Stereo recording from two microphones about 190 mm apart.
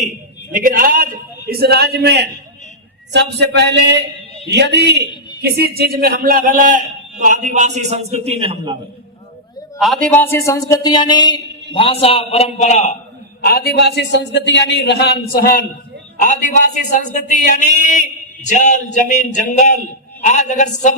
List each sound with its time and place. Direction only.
0.5 s a sound: 45° right (ahead or behind)
3.1 s a man's voice: 65° right (ahead or behind); by 8.8 s 25° right (ahead or behind)
9.7 s a man's voice: centre (ahead or behind)
10.1 s a man's voice: 10° left (ahead or behind); by 12.9 s 35° left (ahead or behind)
13.4 s a man's voice: 55° left (ahead or behind); by 20.9 s 40° left (ahead or behind)